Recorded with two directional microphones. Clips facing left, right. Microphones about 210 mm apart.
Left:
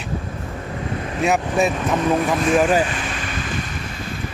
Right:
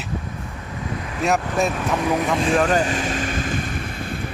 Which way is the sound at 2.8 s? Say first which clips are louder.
Right 4 dB; 40° right (ahead or behind).